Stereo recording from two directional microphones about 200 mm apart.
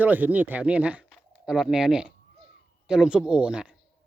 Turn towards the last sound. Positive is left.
turn(degrees=-5)  # may be behind; listen again after turning